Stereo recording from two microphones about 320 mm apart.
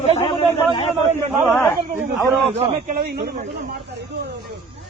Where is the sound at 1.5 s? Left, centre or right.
Centre.